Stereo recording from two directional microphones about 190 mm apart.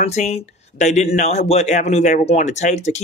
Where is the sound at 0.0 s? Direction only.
35° left (ahead or behind).